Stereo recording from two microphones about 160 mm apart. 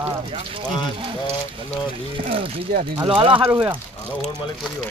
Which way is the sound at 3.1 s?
35° right (ahead or behind).